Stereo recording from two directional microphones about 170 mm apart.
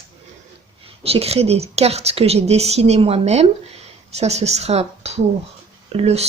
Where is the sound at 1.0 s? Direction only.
35° right (ahead or behind).